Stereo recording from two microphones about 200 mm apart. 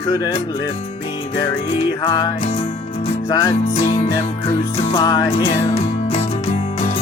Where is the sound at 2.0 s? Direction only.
20° left (ahead or behind).